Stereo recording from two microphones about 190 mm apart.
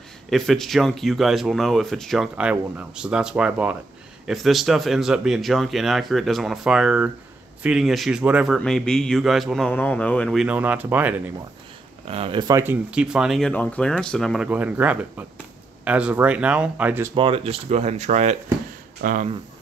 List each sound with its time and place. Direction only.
0.3 s speech: centre (ahead or behind)
12.1 s speech: 30° right (ahead or behind); by 17.1 s 10° right (ahead or behind)
17.1 s speech: 30° right (ahead or behind); by 19.2 s 45° right (ahead or behind)